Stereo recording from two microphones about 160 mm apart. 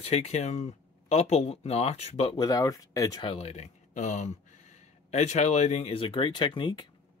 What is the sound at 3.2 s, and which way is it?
Speech, 40° left (ahead or behind).